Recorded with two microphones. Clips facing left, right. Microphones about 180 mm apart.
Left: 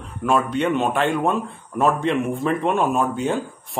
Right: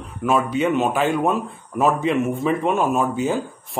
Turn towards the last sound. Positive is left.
turn(degrees=0)  # may be behind; listen again after turning